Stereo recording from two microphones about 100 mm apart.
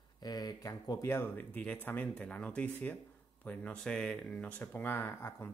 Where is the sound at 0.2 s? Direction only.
45° left (ahead or behind).